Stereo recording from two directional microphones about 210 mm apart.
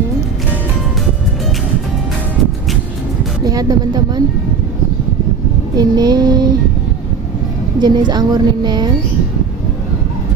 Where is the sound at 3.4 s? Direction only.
15° right (ahead or behind).